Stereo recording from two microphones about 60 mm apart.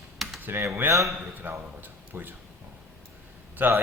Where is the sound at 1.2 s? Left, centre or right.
Right.